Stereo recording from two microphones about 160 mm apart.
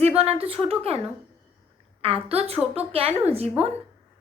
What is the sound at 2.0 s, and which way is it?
A woman's voice, 35° right (ahead or behind).